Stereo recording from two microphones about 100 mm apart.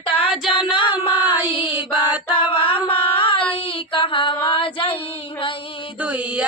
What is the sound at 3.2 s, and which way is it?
Child singing, 60° left (ahead or behind).